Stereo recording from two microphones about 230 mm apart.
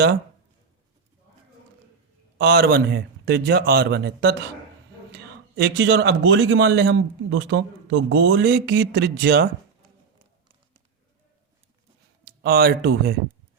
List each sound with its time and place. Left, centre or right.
2.4 s speech: right
12.2 s speech: right